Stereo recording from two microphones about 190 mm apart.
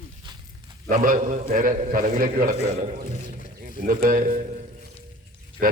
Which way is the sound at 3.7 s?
50° right (ahead or behind).